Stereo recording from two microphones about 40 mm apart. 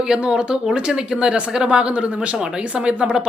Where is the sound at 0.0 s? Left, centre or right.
Centre.